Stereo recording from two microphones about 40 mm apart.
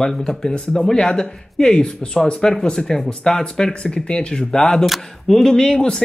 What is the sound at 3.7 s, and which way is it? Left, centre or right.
Speech, left.